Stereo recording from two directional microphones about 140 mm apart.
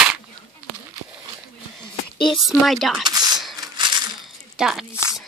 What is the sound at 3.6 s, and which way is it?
Rattle, 30° right (ahead or behind).